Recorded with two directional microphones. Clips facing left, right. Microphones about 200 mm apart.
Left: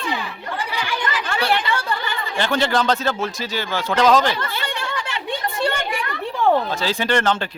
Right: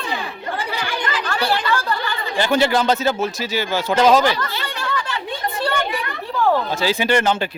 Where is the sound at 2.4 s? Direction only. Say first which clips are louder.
Right 3 dB; 10° right (ahead or behind).